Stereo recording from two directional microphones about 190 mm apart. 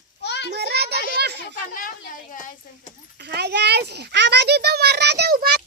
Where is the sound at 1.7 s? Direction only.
45° left (ahead or behind).